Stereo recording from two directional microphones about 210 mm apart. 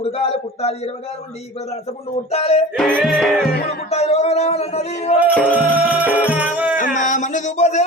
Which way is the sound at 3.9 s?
30° left (ahead or behind).